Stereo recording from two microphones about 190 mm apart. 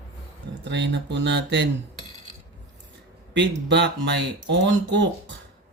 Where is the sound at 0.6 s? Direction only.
65° right (ahead or behind).